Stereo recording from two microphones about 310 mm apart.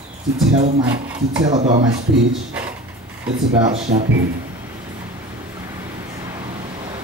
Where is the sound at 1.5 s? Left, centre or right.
Right.